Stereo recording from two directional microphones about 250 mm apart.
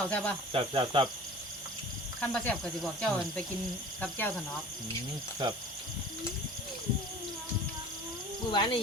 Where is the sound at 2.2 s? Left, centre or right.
Centre.